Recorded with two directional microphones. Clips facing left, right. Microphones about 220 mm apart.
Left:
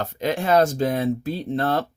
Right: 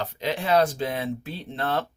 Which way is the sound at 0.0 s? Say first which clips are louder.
Left 4 dB; 45° left (ahead or behind).